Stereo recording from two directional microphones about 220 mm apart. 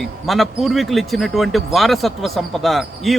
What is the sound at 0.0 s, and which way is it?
Speech, centre (ahead or behind).